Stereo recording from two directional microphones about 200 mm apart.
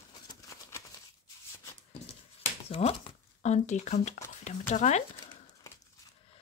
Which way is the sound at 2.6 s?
30° left (ahead or behind).